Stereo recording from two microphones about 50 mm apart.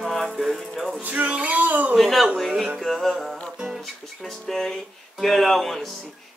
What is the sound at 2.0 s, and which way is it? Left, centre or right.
Music, centre.